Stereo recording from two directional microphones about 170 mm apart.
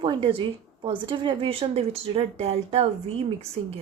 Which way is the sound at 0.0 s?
30° right (ahead or behind).